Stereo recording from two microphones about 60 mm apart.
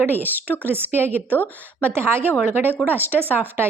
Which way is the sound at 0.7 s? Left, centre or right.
Right.